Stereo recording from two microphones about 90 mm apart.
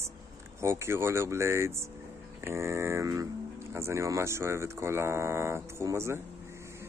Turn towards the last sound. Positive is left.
turn(degrees=-30)  # may be behind; listen again after turning